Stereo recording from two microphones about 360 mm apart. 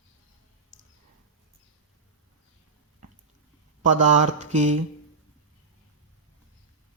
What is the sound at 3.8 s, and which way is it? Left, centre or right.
Speech, centre.